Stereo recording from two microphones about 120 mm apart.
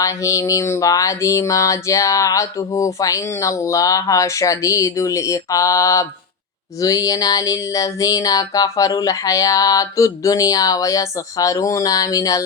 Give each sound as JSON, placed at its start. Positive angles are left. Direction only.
{"t": 0.0, "sound": "speech", "side_deg": 25}